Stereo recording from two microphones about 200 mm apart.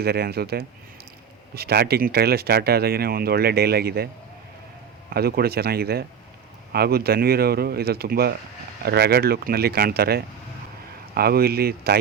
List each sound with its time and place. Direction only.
0.0 s speech: 50° right (ahead or behind)
5.1 s speech: 50° right (ahead or behind)